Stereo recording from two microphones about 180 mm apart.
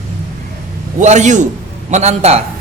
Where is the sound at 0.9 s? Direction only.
40° right (ahead or behind).